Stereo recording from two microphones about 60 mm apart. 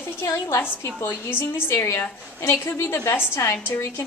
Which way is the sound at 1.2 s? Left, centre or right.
Left.